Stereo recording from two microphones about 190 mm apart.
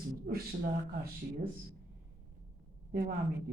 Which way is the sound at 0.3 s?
50° right (ahead or behind).